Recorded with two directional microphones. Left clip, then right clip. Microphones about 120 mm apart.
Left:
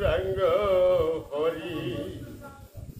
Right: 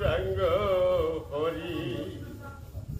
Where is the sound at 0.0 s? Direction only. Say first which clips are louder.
Left 3 dB; 30° left (ahead or behind).